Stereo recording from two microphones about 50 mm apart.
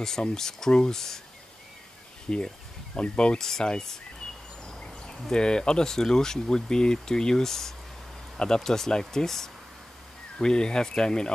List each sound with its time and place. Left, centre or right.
0.0 s speech: centre
2.2 s speech: left